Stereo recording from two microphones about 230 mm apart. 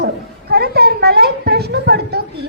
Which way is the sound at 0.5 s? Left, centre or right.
Right.